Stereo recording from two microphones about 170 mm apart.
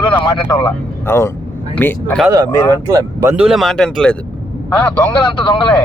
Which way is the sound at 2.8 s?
20° right (ahead or behind).